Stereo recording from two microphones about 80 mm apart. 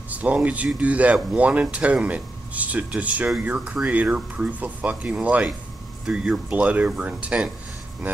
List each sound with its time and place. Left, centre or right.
0.1 s speech: centre